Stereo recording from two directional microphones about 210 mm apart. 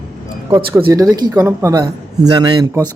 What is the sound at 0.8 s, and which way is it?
Speech, 15° right (ahead or behind).